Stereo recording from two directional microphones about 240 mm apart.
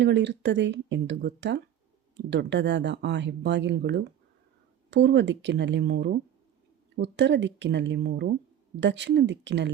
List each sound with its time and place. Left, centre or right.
0.0 s speech: right